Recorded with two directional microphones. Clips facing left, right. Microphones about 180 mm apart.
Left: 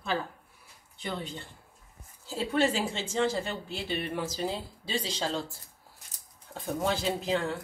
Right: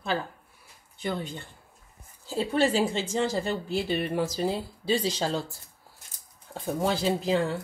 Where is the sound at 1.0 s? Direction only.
45° right (ahead or behind).